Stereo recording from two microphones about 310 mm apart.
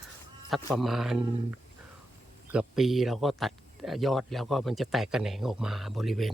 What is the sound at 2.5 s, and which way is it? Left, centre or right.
A man's voice, centre.